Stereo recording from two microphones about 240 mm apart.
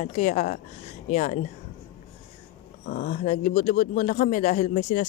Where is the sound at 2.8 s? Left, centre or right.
Left.